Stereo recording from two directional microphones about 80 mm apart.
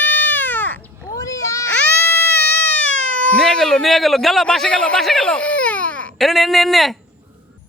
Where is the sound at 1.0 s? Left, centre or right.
Left.